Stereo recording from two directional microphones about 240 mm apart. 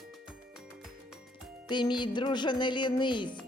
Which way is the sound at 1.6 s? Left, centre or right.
Centre.